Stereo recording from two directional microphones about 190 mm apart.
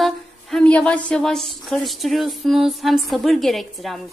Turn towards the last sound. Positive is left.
turn(degrees=0)  # may be behind; listen again after turning